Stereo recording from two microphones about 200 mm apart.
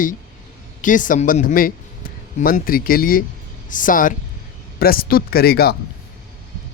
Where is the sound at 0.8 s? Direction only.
40° left (ahead or behind).